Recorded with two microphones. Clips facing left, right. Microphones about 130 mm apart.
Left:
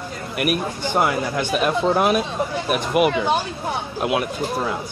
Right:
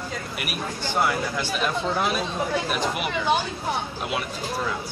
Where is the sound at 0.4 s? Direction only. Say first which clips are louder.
Left 11 dB; 50° left (ahead or behind).